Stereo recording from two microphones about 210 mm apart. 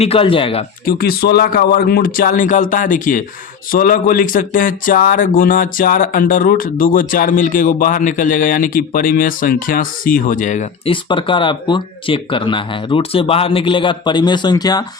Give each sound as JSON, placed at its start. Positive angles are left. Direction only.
{"t": 0.0, "sound": "speech", "side_deg": 25}
{"t": 0.9, "sound": "speech", "side_deg": 45}
{"t": 11.1, "sound": "speech", "side_deg": 25}